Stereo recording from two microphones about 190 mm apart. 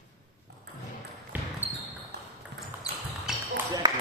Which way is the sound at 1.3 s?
10° right (ahead or behind).